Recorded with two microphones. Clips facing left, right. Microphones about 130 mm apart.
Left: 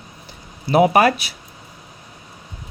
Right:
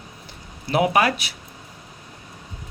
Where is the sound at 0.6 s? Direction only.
40° left (ahead or behind).